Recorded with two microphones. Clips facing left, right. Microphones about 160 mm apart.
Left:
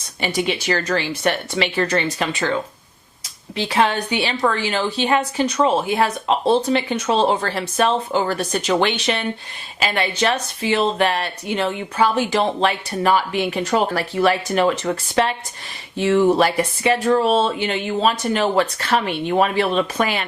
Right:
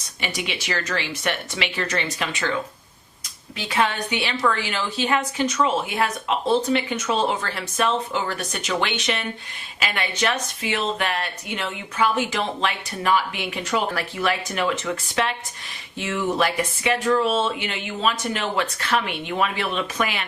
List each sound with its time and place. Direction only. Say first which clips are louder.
0.2 s speech: left 8 dB; 35° left (ahead or behind)
3.6 s speech: left 4 dB; 30° left (ahead or behind)